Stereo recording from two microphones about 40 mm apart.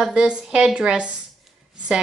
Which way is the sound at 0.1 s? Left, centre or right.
Right.